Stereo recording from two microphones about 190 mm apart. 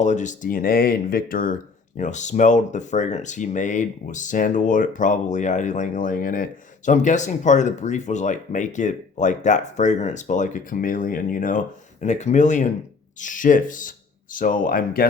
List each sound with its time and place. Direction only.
0.0 s speech: 40° left (ahead or behind)